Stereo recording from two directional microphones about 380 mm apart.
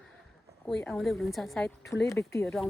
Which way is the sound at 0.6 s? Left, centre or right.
Centre.